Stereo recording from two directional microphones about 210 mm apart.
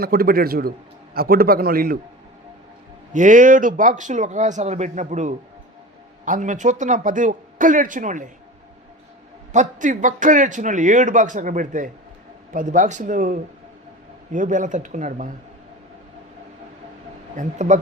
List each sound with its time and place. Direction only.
0.0 s a man's voice: 45° right (ahead or behind)
3.1 s a man's voice: 35° right (ahead or behind)
9.5 s a man's voice: 35° right (ahead or behind)
17.3 s a man's voice: 35° right (ahead or behind)